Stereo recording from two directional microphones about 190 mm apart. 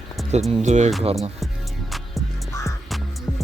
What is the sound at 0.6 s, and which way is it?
Speech, 40° right (ahead or behind).